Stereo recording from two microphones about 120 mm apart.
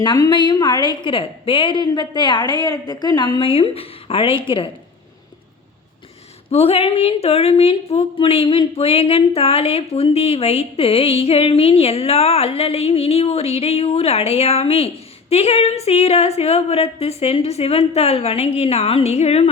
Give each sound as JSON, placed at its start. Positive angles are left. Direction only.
{"t": 0.0, "sound": "a woman's voice", "side_deg": 35}
{"t": 6.5, "sound": "a woman's voice", "side_deg": 55}